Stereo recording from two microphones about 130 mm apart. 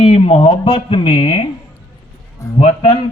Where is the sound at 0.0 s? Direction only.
50° left (ahead or behind).